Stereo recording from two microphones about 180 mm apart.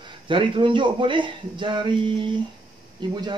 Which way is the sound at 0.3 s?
30° right (ahead or behind).